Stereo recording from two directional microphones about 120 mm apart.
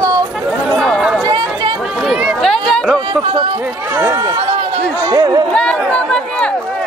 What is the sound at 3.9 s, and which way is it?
Speech, 25° right (ahead or behind).